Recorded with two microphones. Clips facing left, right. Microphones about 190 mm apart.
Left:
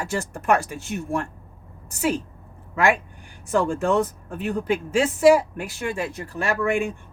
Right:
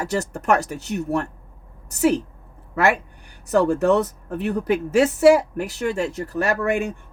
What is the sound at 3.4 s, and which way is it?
Speech, 40° right (ahead or behind).